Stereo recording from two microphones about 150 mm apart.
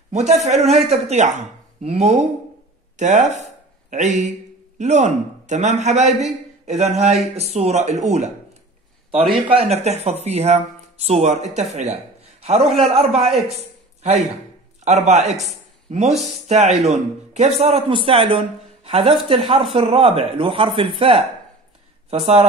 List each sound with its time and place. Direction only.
0.1 s speech: 50° right (ahead or behind)
9.3 s speech: 40° right (ahead or behind)
13.6 s a sound: 45° right (ahead or behind)
15.0 s speech: 50° right (ahead or behind)
22.2 s speech: 45° right (ahead or behind)